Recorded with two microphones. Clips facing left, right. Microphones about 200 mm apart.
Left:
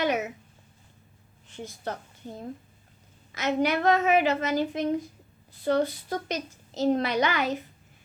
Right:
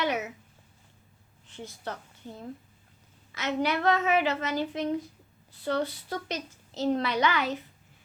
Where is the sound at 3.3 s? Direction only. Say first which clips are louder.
Left 3 dB; 45° left (ahead or behind).